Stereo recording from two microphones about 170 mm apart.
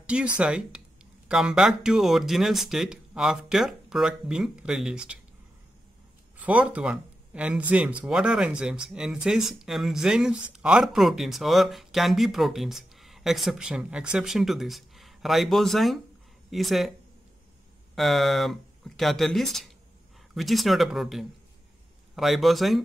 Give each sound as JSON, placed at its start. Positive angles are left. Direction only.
{"t": 0.0, "sound": "speech", "side_deg": -5}
{"t": 6.4, "sound": "speech", "side_deg": -10}
{"t": 17.9, "sound": "speech", "side_deg": 0}